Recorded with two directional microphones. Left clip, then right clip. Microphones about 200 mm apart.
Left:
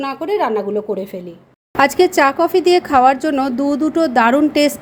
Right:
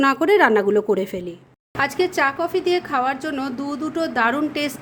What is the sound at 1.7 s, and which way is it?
Speech, 25° left (ahead or behind).